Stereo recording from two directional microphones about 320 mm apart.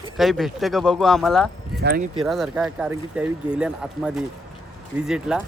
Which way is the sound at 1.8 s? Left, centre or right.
Right.